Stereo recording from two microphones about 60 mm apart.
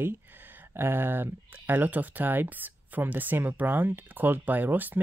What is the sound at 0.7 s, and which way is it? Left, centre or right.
Speech, right.